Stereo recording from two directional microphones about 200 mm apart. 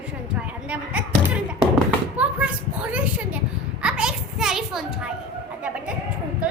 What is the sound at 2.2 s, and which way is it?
Speech, 5° right (ahead or behind).